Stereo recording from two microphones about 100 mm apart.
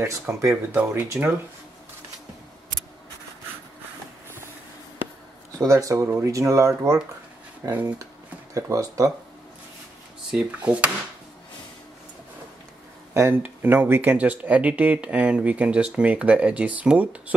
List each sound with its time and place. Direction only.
0.0 s speech: 30° right (ahead or behind)
1.1 s speech: 15° right (ahead or behind)
5.6 s speech: 35° right (ahead or behind)
10.3 s speech: 15° right (ahead or behind)
13.1 s speech: 25° right (ahead or behind)